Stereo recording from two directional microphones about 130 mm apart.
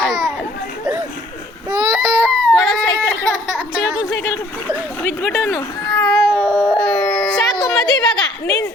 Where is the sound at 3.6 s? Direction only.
5° right (ahead or behind).